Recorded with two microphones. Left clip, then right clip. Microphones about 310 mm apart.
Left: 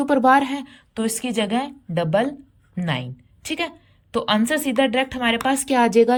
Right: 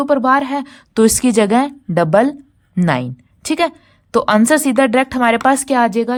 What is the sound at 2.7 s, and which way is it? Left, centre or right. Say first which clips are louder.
A woman's voice: right 9 dB; centre.